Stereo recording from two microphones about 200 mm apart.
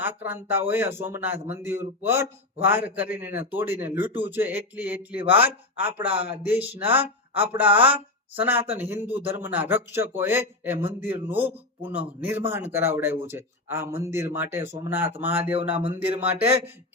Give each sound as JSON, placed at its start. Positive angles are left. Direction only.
{"t": 0.0, "sound": "a man's voice", "side_deg": -10}
{"t": 5.9, "sound": "a man's voice", "side_deg": -25}
{"t": 6.3, "sound": "a man's voice", "side_deg": -10}